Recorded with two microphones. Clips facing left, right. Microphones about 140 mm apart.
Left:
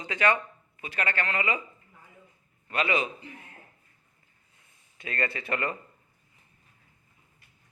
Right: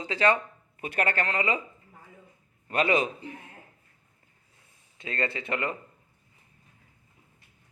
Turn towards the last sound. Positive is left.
turn(degrees=-20)  # may be behind; listen again after turning